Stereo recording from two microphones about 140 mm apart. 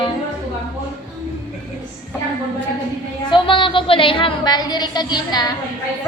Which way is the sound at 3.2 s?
35° left (ahead or behind).